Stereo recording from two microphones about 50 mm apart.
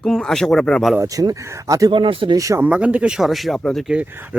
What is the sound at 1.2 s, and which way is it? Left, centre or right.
Speech, right.